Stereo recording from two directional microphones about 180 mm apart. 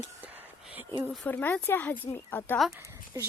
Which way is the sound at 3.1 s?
20° right (ahead or behind).